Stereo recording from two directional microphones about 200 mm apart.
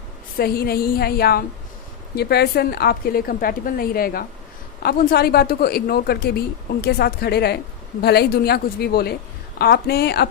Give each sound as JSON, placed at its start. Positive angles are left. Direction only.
{"t": 0.3, "sound": "a woman's voice", "side_deg": 50}